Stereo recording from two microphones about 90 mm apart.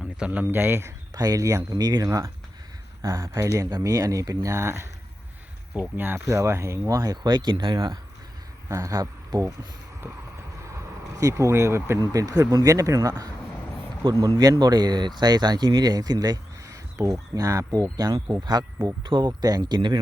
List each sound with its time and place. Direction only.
0.3 s speech: 20° right (ahead or behind)
1.1 s speech: 45° right (ahead or behind)
2.0 s speech: 35° right (ahead or behind)
3.7 s speech: 45° right (ahead or behind)
6.0 s speech: 25° right (ahead or behind)
7.2 s speech: 55° right (ahead or behind)
8.7 s speech: 35° right (ahead or behind)
10.6 s vehicle: 35° right (ahead or behind)
12.1 s speech: 40° right (ahead or behind)